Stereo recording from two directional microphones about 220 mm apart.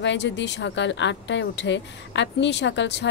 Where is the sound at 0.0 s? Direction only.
55° left (ahead or behind).